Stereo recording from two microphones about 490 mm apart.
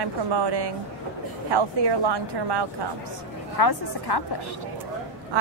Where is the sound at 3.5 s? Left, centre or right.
Left.